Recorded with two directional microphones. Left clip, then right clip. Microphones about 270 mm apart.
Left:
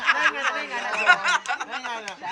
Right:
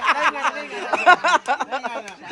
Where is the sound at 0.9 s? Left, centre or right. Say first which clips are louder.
Right 5 dB; centre.